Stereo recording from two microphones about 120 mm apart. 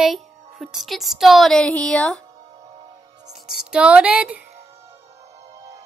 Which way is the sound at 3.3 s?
5° right (ahead or behind).